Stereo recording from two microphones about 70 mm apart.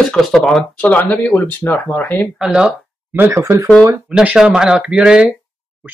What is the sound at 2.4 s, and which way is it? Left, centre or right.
Speech, centre.